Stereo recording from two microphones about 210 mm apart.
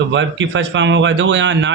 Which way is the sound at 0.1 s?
60° right (ahead or behind).